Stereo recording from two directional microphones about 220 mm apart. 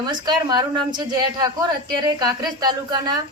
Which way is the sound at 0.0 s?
20° right (ahead or behind).